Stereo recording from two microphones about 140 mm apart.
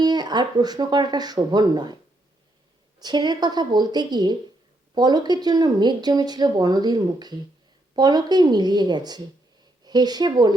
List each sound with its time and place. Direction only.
0.0 s speech: 30° right (ahead or behind)
3.0 s speech: 30° right (ahead or behind)